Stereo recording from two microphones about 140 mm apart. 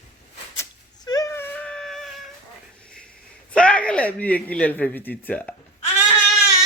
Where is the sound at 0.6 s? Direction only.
25° left (ahead or behind); by 2.2 s centre (ahead or behind).